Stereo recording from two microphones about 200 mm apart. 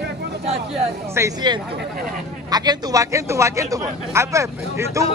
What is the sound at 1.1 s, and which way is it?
A man's voice, 15° right (ahead or behind).